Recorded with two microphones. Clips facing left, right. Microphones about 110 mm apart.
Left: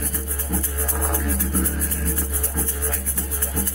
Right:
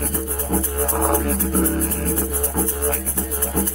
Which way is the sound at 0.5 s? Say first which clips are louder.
Right 6 dB; 20° right (ahead or behind).